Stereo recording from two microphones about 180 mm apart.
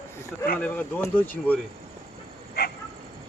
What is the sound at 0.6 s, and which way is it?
Speech, 10° left (ahead or behind).